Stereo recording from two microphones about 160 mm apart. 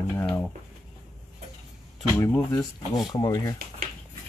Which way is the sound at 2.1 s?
15° left (ahead or behind).